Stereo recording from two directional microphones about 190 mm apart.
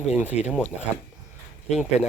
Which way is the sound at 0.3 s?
35° left (ahead or behind).